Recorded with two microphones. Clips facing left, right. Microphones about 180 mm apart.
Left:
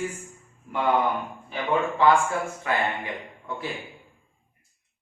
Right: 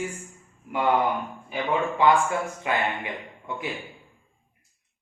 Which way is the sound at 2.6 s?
20° right (ahead or behind).